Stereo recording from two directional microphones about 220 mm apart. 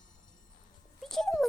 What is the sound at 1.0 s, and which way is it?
Speech, centre (ahead or behind).